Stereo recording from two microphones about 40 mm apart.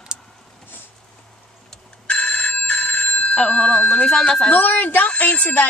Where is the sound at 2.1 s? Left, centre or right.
Left.